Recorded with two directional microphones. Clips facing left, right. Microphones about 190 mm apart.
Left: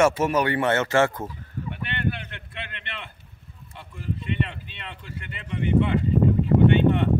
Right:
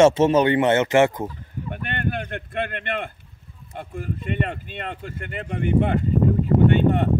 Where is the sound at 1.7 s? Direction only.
45° right (ahead or behind).